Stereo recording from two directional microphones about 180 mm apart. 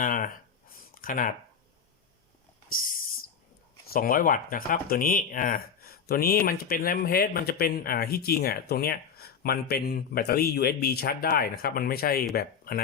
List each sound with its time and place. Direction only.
0.0 s speech: 50° left (ahead or behind)
0.9 s a sound: 50° left (ahead or behind)
3.9 s speech: 50° left (ahead or behind)